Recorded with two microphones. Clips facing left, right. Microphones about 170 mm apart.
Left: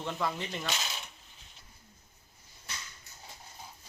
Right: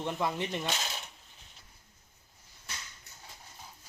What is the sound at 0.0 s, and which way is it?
Speech, 20° right (ahead or behind).